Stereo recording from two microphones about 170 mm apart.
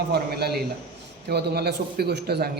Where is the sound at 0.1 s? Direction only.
70° right (ahead or behind).